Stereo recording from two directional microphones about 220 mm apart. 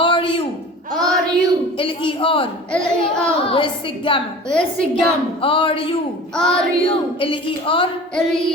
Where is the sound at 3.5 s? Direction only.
25° left (ahead or behind).